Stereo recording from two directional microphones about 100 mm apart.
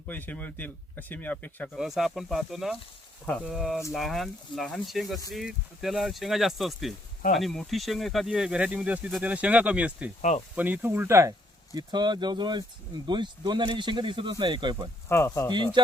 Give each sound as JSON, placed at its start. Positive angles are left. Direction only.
{"t": 0.1, "sound": "speech", "side_deg": 15}
{"t": 1.7, "sound": "speech", "side_deg": -5}
{"t": 15.1, "sound": "speech", "side_deg": 25}
{"t": 15.5, "sound": "speech", "side_deg": -50}